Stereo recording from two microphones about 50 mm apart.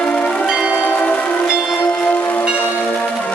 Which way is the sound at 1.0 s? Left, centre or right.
Centre.